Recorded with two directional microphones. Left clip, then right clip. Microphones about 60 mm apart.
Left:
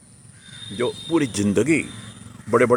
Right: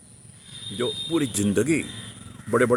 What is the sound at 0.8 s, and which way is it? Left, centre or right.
Speech, left.